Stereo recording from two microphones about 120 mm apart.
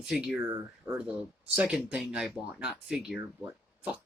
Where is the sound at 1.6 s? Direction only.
5° right (ahead or behind).